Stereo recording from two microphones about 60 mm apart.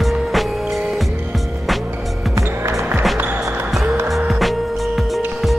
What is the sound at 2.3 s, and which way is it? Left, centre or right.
Music, right.